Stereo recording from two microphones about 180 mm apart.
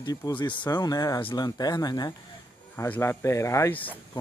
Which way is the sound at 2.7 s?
10° left (ahead or behind).